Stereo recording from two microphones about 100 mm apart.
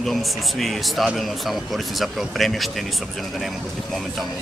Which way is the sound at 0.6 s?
Centre (ahead or behind).